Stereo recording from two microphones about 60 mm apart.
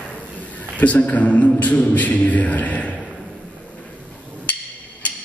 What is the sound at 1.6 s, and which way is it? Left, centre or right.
A man's voice, left.